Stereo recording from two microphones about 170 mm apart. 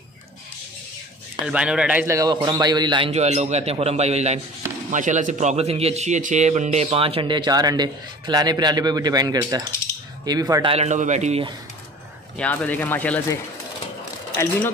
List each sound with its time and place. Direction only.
1.4 s a man's voice: 5° right (ahead or behind); by 10.7 s 20° right (ahead or behind)
10.7 s a man's voice: 40° right (ahead or behind)
12.4 s speech: 10° left (ahead or behind)